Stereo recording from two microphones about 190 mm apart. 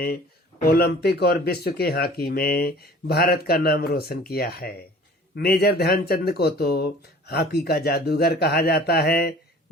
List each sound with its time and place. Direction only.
0.7 s speech: 55° left (ahead or behind)